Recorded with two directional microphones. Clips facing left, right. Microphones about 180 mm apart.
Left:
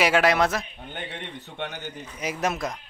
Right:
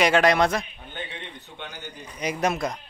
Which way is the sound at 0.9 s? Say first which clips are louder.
Left 1 dB; 70° left (ahead or behind).